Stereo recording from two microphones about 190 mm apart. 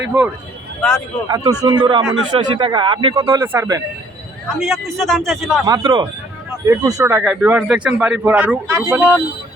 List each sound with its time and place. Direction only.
0.8 s speech: 15° left (ahead or behind)
1.3 s speech: 20° right (ahead or behind)
3.2 s speech: 15° right (ahead or behind)
4.6 s speech: centre (ahead or behind)
5.6 s speech: 20° right (ahead or behind)